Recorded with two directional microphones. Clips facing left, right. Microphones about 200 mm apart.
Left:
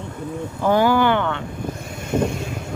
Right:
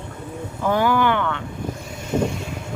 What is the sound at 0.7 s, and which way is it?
Speech, 30° left (ahead or behind).